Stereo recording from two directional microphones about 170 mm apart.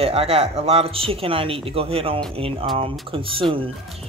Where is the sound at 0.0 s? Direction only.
35° right (ahead or behind).